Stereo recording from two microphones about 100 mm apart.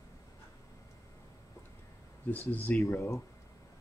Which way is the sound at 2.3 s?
20° left (ahead or behind).